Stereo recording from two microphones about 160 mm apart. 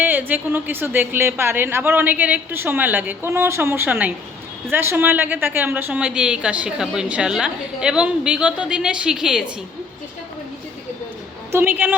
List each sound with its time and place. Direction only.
0.0 s a woman's voice: 10° right (ahead or behind)
11.5 s a woman's voice: 10° right (ahead or behind)